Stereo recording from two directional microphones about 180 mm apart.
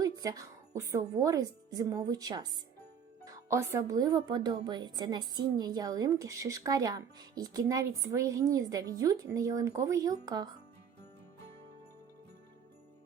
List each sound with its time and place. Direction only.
0.0 s music: 20° right (ahead or behind)
0.8 s speech: 15° right (ahead or behind)